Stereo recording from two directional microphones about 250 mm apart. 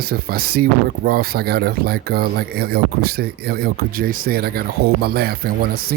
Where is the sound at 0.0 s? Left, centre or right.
Right.